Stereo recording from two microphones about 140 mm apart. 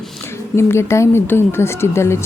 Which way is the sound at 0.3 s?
20° left (ahead or behind).